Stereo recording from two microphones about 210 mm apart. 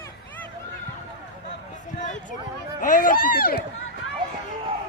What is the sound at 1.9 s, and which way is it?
Speech, 35° left (ahead or behind).